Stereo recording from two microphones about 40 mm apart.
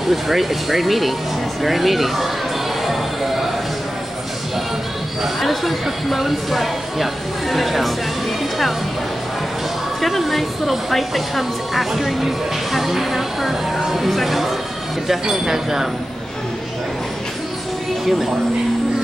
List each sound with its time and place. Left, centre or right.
0.1 s speech: centre
2.8 s music: centre
5.2 s speech: centre
10.0 s speech: centre